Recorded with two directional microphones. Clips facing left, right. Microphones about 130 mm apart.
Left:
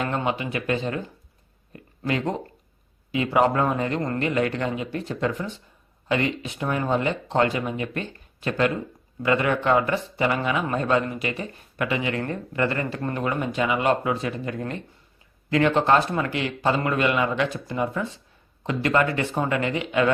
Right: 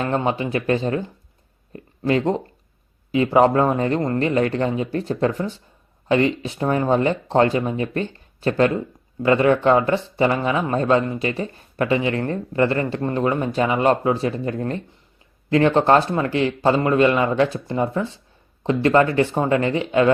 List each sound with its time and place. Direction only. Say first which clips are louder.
0.0 s speech: right 4 dB; 35° right (ahead or behind)
1.7 s a sound: right 6 dB; 30° right (ahead or behind)
3.1 s speech: right 5 dB; 30° right (ahead or behind)